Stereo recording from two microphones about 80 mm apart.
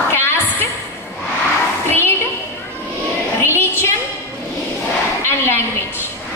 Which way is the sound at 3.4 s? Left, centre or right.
Left.